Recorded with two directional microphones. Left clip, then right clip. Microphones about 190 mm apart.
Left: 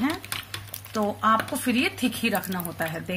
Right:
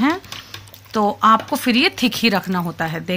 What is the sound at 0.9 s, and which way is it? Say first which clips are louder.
Speech: right 8 dB; 40° right (ahead or behind).